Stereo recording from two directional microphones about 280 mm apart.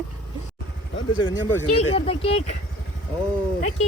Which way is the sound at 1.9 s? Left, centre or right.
Centre.